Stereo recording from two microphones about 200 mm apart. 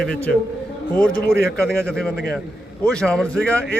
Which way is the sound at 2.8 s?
5° left (ahead or behind).